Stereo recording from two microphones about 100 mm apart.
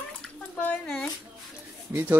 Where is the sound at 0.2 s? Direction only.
10° left (ahead or behind).